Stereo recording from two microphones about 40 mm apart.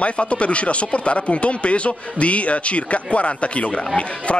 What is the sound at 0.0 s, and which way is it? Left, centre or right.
Speech, left.